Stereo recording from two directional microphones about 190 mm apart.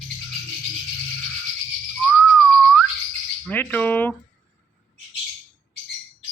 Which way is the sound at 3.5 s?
10° left (ahead or behind).